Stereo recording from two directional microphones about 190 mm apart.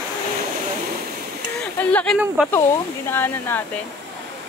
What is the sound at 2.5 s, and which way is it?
Speech, 10° left (ahead or behind).